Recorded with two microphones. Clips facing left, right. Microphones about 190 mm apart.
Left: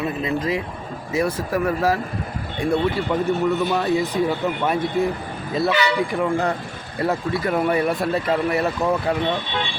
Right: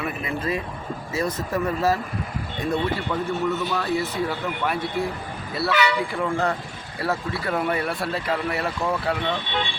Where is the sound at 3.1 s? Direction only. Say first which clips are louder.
Left 4 dB; 15° left (ahead or behind).